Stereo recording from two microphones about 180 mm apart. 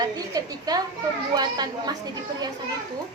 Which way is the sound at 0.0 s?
20° right (ahead or behind).